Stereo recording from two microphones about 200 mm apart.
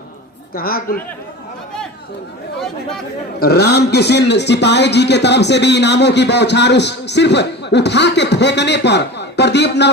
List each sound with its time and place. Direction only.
0.5 s a woman's voice: 45° left (ahead or behind)
3.4 s speech: 55° left (ahead or behind)